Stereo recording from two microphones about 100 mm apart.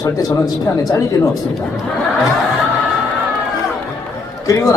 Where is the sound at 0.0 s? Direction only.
35° left (ahead or behind).